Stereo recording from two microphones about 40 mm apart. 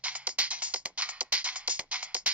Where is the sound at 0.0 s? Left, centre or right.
Right.